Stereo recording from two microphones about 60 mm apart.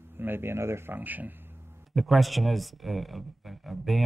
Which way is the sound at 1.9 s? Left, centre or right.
Centre.